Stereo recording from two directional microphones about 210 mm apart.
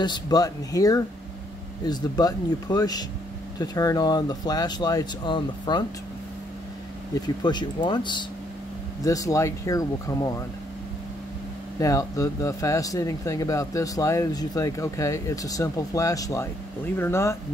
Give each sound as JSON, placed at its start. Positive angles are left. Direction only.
{"t": 0.0, "sound": "speech", "side_deg": 20}
{"t": 7.2, "sound": "speech", "side_deg": 20}
{"t": 11.8, "sound": "speech", "side_deg": 15}